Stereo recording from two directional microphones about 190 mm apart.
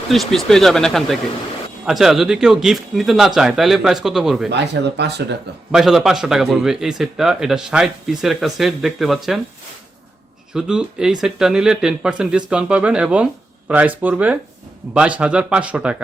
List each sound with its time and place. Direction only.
0.1 s speech: centre (ahead or behind)
4.5 s speech: 65° right (ahead or behind)
5.7 s speech: centre (ahead or behind)
10.5 s speech: 5° right (ahead or behind)